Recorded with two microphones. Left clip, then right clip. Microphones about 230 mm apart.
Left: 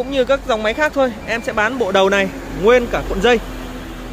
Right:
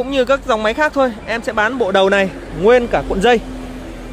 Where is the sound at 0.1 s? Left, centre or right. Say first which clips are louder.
Right 1 dB; centre.